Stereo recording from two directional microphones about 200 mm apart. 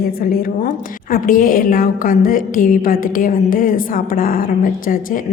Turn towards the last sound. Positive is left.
turn(degrees=45)  # may be behind; listen again after turning